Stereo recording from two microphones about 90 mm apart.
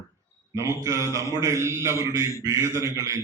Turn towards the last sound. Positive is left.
turn(degrees=-35)  # may be behind; listen again after turning